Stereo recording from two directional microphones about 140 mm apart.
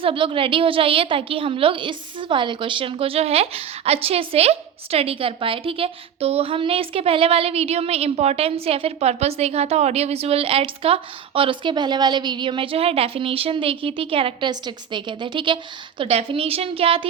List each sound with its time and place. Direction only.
0.0 s a woman's voice: 40° right (ahead or behind)